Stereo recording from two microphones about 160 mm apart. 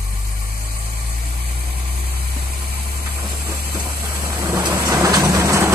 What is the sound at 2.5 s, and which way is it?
Engine, 65° right (ahead or behind).